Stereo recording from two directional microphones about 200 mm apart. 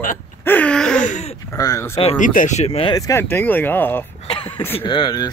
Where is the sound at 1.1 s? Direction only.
35° left (ahead or behind).